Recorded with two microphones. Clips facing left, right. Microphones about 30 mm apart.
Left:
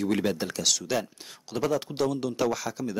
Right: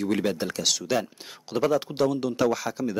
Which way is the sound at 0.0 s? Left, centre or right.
Centre.